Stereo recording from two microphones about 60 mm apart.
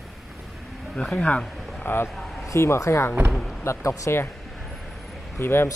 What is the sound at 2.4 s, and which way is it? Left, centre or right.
Speech, left.